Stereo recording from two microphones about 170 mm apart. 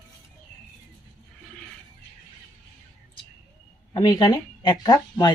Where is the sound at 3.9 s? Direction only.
25° left (ahead or behind).